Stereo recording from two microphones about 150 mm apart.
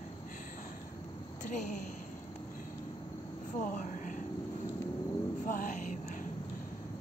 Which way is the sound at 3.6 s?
60° left (ahead or behind).